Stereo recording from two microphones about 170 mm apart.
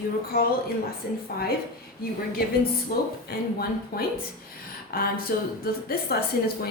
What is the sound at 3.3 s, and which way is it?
A woman's voice, 65° left (ahead or behind).